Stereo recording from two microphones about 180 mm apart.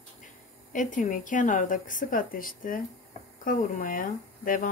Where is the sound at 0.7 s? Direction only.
45° left (ahead or behind).